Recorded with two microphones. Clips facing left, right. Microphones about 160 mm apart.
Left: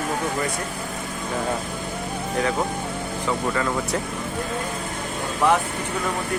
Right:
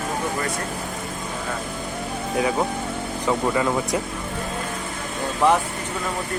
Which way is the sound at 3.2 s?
15° right (ahead or behind).